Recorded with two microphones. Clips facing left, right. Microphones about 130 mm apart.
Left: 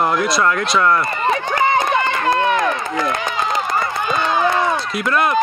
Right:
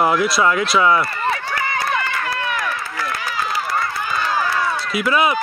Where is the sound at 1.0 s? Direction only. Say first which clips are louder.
Left 4 dB; 20° left (ahead or behind).